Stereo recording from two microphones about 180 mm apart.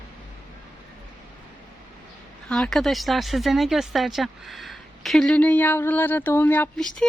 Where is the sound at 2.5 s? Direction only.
5° left (ahead or behind).